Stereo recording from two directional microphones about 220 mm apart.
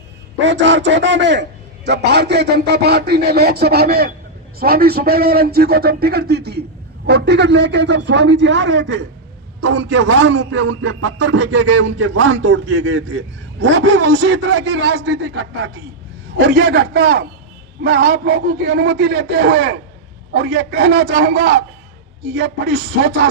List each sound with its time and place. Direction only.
0.3 s a man's voice: 55° right (ahead or behind)
14.9 s a man's voice: 75° right (ahead or behind); by 23.3 s 50° right (ahead or behind)